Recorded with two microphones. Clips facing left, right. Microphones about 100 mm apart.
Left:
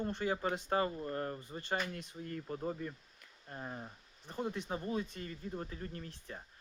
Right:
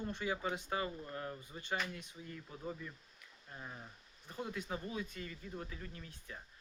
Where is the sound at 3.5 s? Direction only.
35° left (ahead or behind).